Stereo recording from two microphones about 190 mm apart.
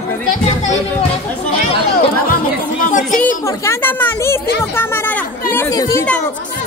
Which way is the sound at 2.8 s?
40° left (ahead or behind).